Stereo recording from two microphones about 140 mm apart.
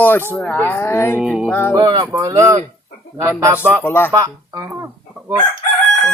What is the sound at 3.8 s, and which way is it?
Speech, 15° left (ahead or behind).